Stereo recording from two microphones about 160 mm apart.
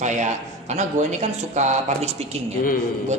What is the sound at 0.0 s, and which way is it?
A man's voice, 50° right (ahead or behind).